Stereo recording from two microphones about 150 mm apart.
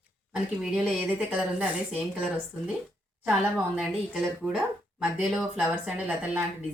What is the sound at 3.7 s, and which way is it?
Speech, 5° right (ahead or behind).